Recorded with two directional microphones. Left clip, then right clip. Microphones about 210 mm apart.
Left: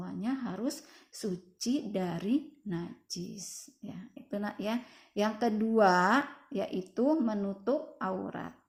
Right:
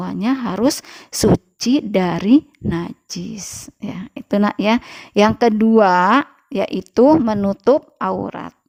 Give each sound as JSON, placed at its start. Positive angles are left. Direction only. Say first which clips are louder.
{"t": 0.0, "sound": "speech", "louder": "right 16 dB", "side_deg": -40}